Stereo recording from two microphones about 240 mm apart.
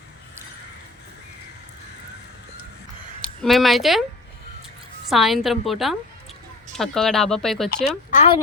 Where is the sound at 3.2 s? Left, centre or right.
Centre.